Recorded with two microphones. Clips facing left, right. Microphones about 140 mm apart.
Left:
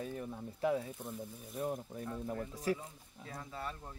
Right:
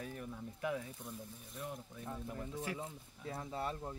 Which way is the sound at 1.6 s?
40° left (ahead or behind).